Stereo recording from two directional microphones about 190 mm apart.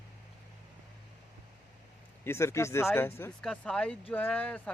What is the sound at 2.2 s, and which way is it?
Speech, 15° left (ahead or behind).